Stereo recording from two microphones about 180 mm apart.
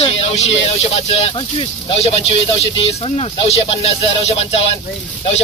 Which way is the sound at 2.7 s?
30° left (ahead or behind).